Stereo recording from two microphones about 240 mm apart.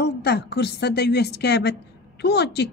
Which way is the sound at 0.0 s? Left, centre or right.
Left.